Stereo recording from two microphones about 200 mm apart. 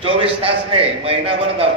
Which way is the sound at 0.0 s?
30° right (ahead or behind).